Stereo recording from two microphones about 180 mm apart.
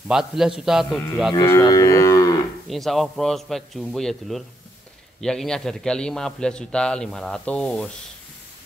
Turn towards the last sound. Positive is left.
turn(degrees=5)  # may be behind; listen again after turning